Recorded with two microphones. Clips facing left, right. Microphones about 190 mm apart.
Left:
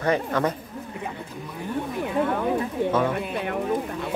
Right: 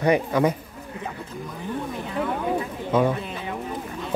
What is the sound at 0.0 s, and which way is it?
Speech, 10° right (ahead or behind).